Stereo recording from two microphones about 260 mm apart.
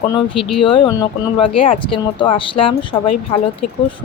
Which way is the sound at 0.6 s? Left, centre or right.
Centre.